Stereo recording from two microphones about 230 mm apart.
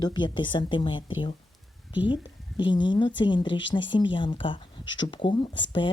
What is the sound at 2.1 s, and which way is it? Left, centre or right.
Speech, centre.